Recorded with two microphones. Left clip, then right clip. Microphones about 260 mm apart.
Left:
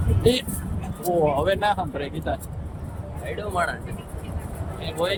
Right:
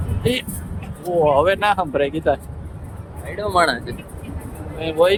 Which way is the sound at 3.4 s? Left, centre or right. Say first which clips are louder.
Right 9 dB; right.